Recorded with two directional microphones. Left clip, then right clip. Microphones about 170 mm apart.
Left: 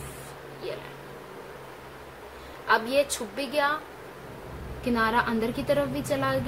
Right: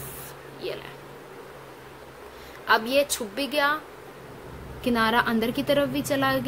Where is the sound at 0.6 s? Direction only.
35° right (ahead or behind).